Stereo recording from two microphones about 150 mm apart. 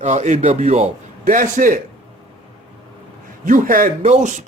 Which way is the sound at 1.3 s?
60° right (ahead or behind).